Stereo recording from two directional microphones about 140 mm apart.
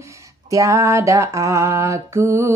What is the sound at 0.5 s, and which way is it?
Mantra, 25° right (ahead or behind).